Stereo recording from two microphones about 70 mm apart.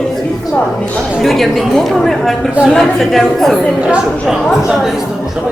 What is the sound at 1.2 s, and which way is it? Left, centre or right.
A woman's voice, centre.